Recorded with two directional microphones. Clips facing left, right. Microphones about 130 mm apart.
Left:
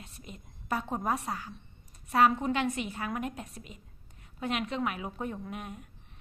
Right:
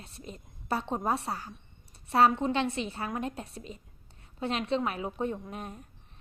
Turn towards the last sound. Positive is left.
turn(degrees=-35)  # may be behind; listen again after turning